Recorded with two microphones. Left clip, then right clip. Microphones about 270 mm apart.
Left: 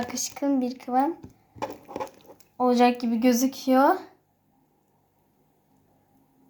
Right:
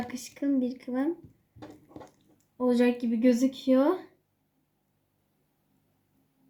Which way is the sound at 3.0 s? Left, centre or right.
Left.